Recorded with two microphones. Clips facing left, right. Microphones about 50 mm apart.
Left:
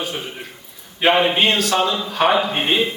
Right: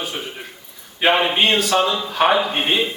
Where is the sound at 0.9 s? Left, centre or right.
Centre.